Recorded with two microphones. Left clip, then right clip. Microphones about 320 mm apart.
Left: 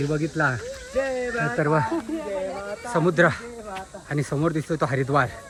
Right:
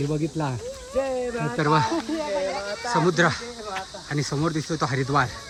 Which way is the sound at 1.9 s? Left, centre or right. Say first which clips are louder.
Right 2 dB; right.